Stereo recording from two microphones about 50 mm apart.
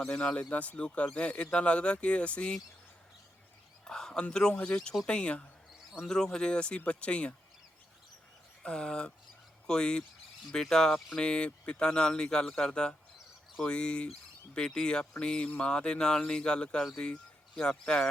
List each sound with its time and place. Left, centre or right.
0.0 s speech: left
3.8 s a sound: centre
4.5 s speech: left
6.0 s speech: centre
8.6 s speech: centre